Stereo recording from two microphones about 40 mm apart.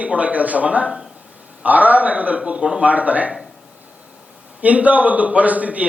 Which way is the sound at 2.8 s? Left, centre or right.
Right.